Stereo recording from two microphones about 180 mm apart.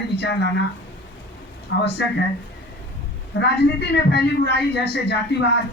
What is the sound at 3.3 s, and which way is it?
Speech, 65° left (ahead or behind).